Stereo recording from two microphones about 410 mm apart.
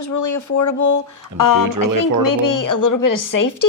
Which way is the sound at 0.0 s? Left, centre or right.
Left.